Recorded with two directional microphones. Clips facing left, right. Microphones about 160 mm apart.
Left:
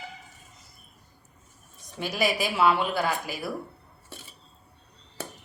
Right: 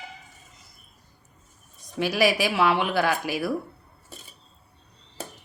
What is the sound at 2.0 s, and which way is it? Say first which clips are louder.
A woman's voice: right 5 dB; 90° right.